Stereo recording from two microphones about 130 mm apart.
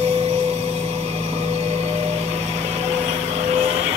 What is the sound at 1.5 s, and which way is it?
Vehicle, 60° right (ahead or behind).